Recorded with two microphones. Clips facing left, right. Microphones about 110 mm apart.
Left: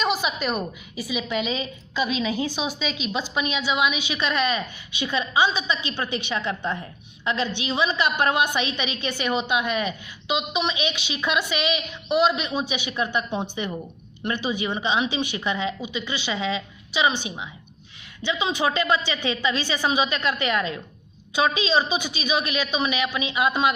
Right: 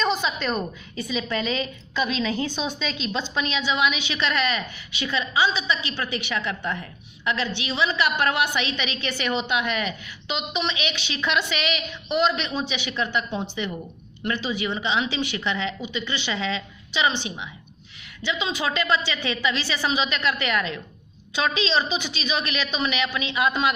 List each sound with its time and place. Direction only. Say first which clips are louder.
0.0 s a woman's voice: even; 10° left (ahead or behind)